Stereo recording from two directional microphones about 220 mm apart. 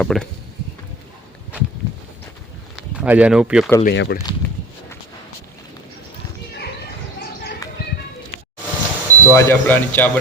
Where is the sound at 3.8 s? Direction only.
50° left (ahead or behind).